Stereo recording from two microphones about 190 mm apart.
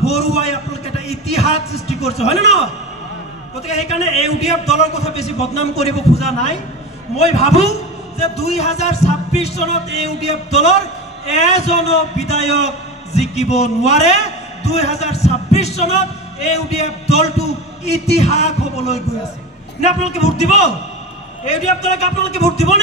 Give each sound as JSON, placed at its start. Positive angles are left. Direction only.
{"t": 0.0, "sound": "a sound", "side_deg": 35}
{"t": 3.6, "sound": "a man's voice", "side_deg": 35}
{"t": 21.9, "sound": "a man's voice", "side_deg": 35}